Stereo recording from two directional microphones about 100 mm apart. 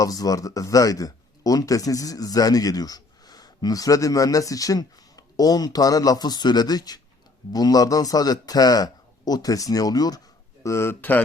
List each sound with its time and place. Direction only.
0.0 s speech: 40° left (ahead or behind)
10.6 s speech: 30° left (ahead or behind)